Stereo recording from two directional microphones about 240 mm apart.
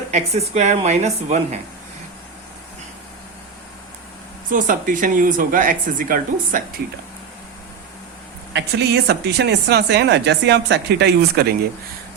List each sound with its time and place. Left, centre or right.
0.1 s speech: right
4.5 s speech: right
8.5 s speech: right